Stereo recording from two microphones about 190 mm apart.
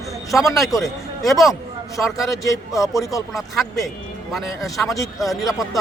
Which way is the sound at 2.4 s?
15° left (ahead or behind).